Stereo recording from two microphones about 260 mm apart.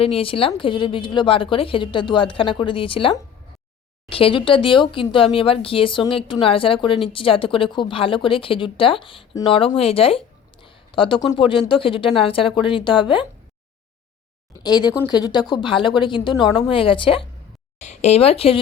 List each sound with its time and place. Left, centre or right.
0.0 s speech: left
14.6 s speech: centre